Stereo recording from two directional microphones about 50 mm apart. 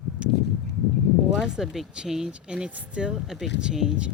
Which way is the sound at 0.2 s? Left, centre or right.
Right.